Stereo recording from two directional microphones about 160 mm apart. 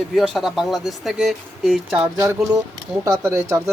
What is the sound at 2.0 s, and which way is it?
Speech, 15° right (ahead or behind).